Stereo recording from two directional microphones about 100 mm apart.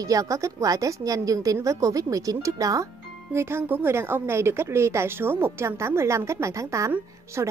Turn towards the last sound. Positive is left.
turn(degrees=-30)  # may be behind; listen again after turning